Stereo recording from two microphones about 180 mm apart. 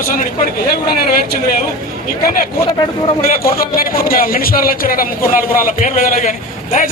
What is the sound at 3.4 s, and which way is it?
A man's voice, 55° left (ahead or behind).